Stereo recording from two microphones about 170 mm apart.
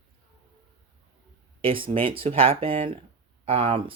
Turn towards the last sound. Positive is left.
turn(degrees=-35)  # may be behind; listen again after turning